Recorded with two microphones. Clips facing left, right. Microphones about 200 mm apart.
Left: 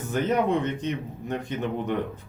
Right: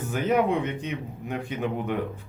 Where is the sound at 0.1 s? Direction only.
10° right (ahead or behind).